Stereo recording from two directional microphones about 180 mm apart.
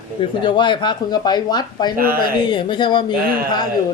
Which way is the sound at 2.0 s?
50° right (ahead or behind).